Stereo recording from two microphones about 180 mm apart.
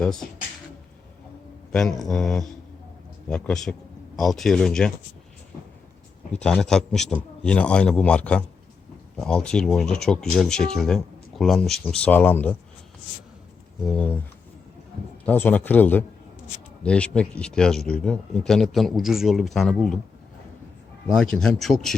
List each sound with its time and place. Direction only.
0.0 s speech: 5° left (ahead or behind)
1.7 s speech: centre (ahead or behind)
6.3 s speech: 5° left (ahead or behind)
13.8 s a man's voice: 5° left (ahead or behind)
15.3 s a man's voice: 10° left (ahead or behind)
21.2 s speech: 5° left (ahead or behind)